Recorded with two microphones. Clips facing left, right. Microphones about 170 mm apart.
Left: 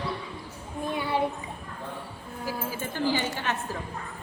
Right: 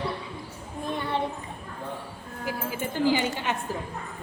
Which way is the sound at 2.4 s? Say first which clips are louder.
Right 2 dB; 15° right (ahead or behind).